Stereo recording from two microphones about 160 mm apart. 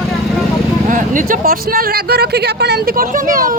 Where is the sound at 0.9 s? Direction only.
55° right (ahead or behind).